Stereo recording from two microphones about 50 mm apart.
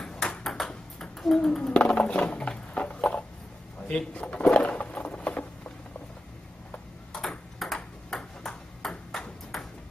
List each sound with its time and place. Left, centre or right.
0.0 s ping: centre
1.2 s a child's voice: centre
1.7 s a sound: centre
4.1 s speech: left
4.5 s patter: centre
7.1 s ping: centre